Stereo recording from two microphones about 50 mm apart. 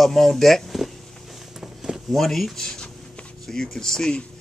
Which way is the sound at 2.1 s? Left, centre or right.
Centre.